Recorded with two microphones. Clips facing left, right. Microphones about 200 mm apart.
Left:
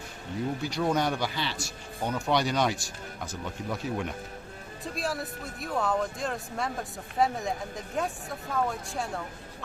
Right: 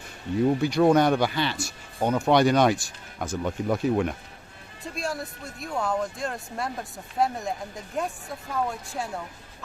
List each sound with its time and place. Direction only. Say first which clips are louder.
0.6 s speech: right 7 dB; 60° right (ahead or behind)
4.8 s speech: right 1 dB; centre (ahead or behind)